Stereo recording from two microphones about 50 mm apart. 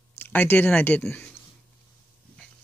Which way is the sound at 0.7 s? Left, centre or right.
Left.